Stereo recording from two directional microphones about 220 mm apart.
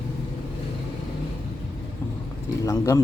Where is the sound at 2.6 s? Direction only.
15° left (ahead or behind).